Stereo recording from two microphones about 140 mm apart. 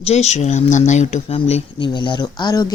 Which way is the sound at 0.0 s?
50° left (ahead or behind).